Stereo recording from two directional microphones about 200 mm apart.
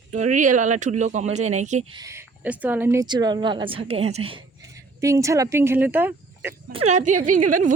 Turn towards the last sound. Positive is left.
turn(degrees=-40)  # may be behind; listen again after turning